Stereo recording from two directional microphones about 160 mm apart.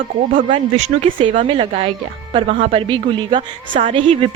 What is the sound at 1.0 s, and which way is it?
A woman's voice, 35° right (ahead or behind).